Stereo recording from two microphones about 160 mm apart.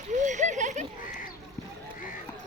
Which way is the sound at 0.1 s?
50° right (ahead or behind).